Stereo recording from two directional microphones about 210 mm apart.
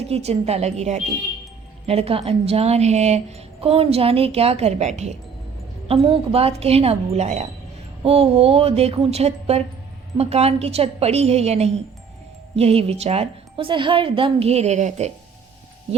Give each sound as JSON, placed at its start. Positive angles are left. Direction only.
{"t": 0.1, "sound": "speech", "side_deg": -30}